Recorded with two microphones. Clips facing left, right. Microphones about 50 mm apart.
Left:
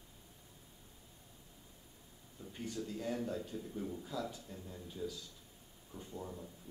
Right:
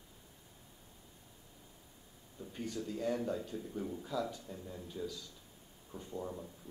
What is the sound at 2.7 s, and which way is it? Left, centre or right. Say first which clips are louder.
Speech: right 3 dB; centre.